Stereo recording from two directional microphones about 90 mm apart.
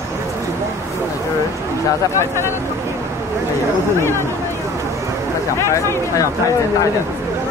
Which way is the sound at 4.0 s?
30° left (ahead or behind).